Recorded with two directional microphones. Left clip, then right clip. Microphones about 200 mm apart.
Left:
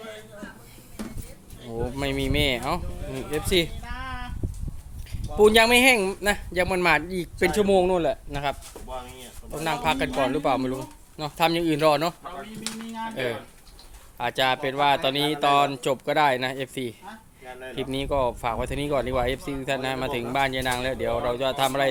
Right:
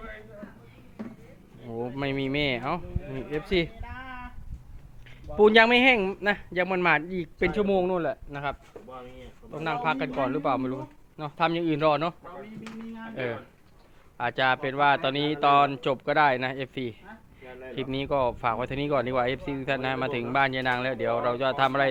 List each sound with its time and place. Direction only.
1.7 s speech: 15° left (ahead or behind)
5.4 s speech: 10° left (ahead or behind); by 8.5 s 30° left (ahead or behind)
9.6 s a man's voice: 25° left (ahead or behind)
13.1 s a man's voice: 20° left (ahead or behind)